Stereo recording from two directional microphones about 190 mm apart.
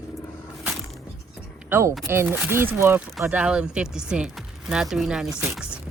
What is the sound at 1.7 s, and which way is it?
Speech, 10° right (ahead or behind).